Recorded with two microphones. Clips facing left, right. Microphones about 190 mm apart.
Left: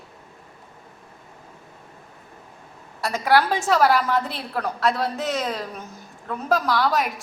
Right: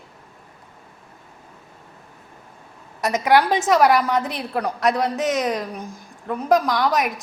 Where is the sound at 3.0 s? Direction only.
20° right (ahead or behind).